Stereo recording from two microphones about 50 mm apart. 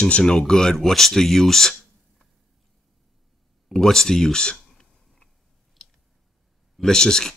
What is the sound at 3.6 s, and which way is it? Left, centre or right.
Clicking, centre.